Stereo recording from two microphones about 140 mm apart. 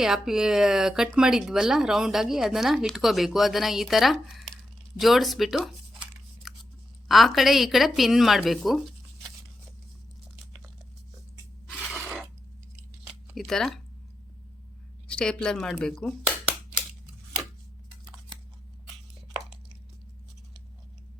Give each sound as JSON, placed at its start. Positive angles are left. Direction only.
{"t": 0.0, "sound": "speech", "side_deg": -5}
{"t": 4.9, "sound": "a sound", "side_deg": 0}
{"t": 7.1, "sound": "speech", "side_deg": 0}
{"t": 11.7, "sound": "mechanisms", "side_deg": -5}
{"t": 13.3, "sound": "speech", "side_deg": 5}
{"t": 15.0, "sound": "speech", "side_deg": 5}